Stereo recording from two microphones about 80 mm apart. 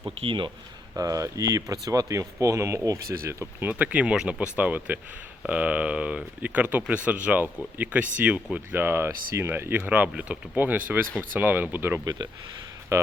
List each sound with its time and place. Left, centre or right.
0.0 s speech: right
0.9 s speech: right
3.7 s speech: centre
12.9 s speech: right